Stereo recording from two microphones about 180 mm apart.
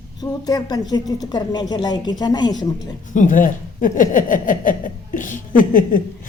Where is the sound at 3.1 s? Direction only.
45° left (ahead or behind).